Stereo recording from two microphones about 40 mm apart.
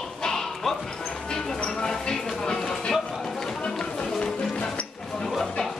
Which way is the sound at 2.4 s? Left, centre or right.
Centre.